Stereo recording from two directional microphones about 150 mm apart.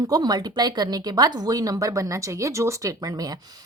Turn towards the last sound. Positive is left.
turn(degrees=-25)  # may be behind; listen again after turning